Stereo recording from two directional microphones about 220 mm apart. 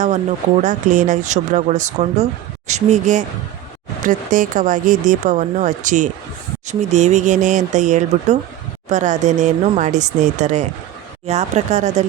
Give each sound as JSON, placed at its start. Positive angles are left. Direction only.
{"t": 0.6, "sound": "speech", "side_deg": -35}